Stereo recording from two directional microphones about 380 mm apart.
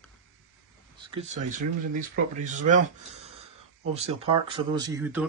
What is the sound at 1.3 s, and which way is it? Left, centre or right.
Speech, centre.